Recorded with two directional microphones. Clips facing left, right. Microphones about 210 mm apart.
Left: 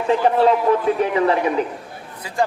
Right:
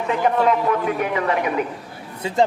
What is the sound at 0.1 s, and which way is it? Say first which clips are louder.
A man's voice: left 3 dB; 30° left (ahead or behind).